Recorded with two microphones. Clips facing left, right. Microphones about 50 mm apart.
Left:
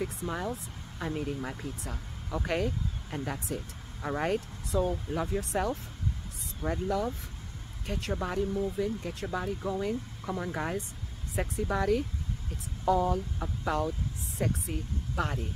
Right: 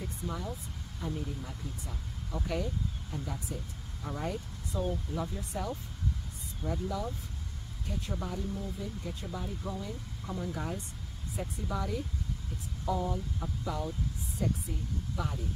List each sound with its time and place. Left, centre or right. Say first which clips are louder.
0.0 s speech: left 5 dB; left
4.7 s speech: left 6 dB; left
5.1 s speech: left 6 dB; left
6.6 s speech: left 5 dB; left